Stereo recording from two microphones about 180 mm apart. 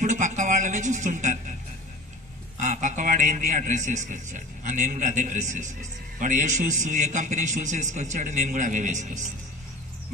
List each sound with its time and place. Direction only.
0.0 s speech: 40° right (ahead or behind)
2.5 s a man's voice: 45° right (ahead or behind)